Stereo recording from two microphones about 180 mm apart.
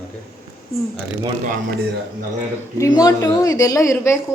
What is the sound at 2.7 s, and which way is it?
Speech, 20° left (ahead or behind).